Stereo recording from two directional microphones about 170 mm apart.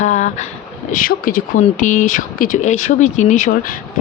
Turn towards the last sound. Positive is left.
turn(degrees=50)  # may be behind; listen again after turning